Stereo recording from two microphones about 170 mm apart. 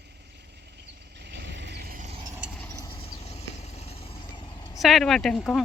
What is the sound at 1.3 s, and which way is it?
Vehicle, 85° right.